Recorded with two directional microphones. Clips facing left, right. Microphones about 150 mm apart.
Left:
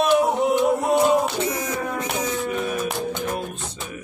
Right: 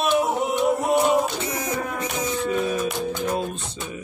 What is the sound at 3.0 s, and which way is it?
Music, 20° left (ahead or behind).